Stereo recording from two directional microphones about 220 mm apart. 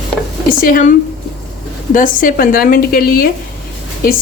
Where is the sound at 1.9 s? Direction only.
35° left (ahead or behind).